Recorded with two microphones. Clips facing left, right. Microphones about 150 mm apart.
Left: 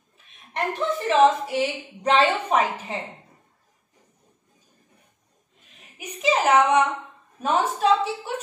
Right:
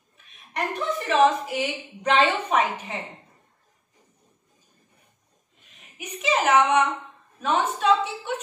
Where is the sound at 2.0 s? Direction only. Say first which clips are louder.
Left 1 dB; 30° left (ahead or behind).